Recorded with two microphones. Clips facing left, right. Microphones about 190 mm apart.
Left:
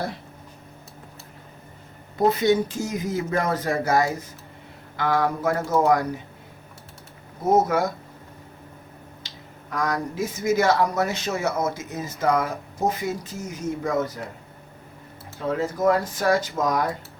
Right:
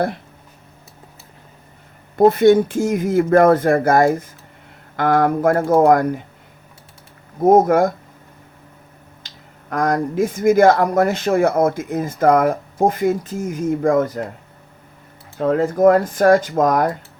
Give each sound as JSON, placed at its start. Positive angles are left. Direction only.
{"t": 2.1, "sound": "speech", "side_deg": -55}
{"t": 7.4, "sound": "speech", "side_deg": -50}
{"t": 9.2, "sound": "speech", "side_deg": -55}
{"t": 15.4, "sound": "speech", "side_deg": -55}